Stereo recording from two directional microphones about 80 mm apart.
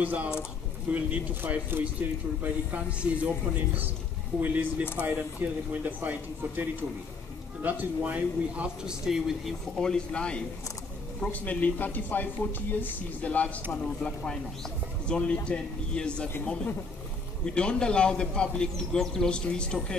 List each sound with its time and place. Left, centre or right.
0.0 s speech: centre
4.4 s speech: centre